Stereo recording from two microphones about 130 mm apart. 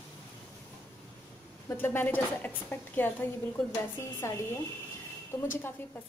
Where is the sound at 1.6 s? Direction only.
15° left (ahead or behind).